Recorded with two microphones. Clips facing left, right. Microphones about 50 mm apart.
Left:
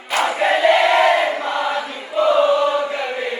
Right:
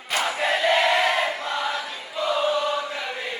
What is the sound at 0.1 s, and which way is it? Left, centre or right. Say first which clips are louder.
Crowd: left 6 dB; centre.